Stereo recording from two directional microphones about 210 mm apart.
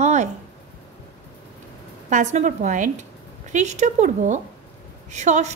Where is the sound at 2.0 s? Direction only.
35° right (ahead or behind).